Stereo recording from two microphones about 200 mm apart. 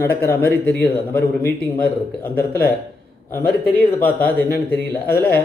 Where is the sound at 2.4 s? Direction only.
50° left (ahead or behind).